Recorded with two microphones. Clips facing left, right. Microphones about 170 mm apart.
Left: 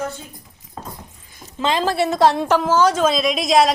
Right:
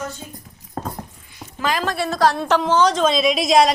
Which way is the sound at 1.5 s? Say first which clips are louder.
Left 3 dB; 25° left (ahead or behind).